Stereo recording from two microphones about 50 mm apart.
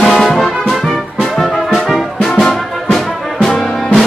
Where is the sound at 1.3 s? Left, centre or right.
Centre.